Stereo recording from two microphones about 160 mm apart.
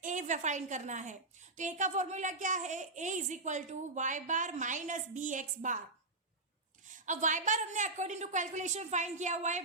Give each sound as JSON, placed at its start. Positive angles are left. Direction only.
{"t": 0.0, "sound": "a woman's voice", "side_deg": -50}
{"t": 6.8, "sound": "a woman's voice", "side_deg": -50}